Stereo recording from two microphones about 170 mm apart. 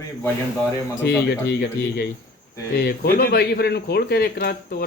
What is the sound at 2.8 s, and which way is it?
Speech, 65° left (ahead or behind).